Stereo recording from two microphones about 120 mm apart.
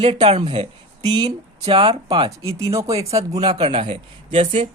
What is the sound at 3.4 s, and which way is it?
Speech, 45° right (ahead or behind).